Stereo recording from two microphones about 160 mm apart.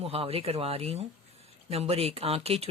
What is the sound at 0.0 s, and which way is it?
Speech, 35° right (ahead or behind).